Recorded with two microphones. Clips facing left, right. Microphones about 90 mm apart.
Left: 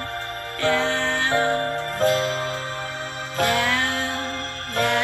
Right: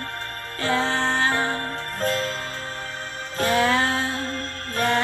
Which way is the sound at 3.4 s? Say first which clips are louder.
Right 2 dB; 30° right (ahead or behind).